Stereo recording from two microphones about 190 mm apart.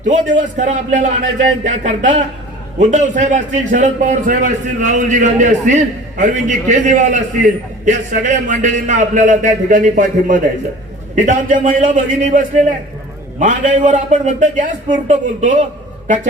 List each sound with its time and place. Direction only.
0.1 s a man's voice: 40° right (ahead or behind)